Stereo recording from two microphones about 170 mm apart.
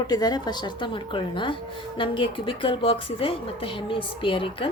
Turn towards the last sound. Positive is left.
turn(degrees=30)  # may be behind; listen again after turning